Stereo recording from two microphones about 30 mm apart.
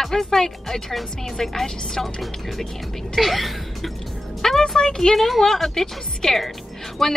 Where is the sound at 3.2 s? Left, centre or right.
Centre.